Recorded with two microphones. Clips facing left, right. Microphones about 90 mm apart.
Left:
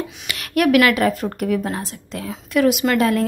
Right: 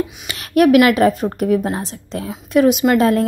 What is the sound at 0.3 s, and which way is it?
A woman's voice, 25° right (ahead or behind).